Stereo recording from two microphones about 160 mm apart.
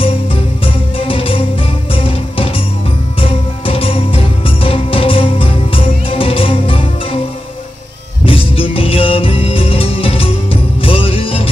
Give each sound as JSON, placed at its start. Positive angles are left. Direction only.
{"t": 0.0, "sound": "music", "side_deg": 35}
{"t": 8.3, "sound": "music", "side_deg": 35}